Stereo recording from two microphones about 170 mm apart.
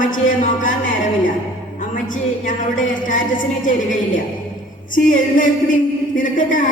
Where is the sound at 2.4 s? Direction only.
50° left (ahead or behind).